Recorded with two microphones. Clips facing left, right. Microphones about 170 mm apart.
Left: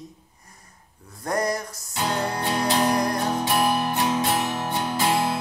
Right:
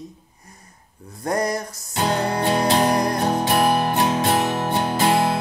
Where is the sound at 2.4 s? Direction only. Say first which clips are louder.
Right 4 dB; 25° right (ahead or behind).